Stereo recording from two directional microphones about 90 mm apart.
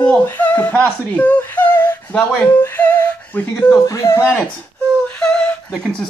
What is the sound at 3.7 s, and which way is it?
Speech, 35° left (ahead or behind).